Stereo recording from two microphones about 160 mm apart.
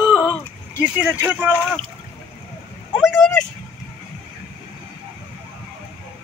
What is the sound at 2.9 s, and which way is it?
Vehicle, 5° left (ahead or behind).